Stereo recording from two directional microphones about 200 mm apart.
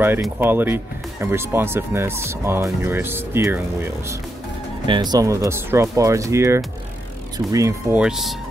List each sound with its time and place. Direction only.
0.2 s speech: 10° right (ahead or behind)
8.0 s speech: centre (ahead or behind)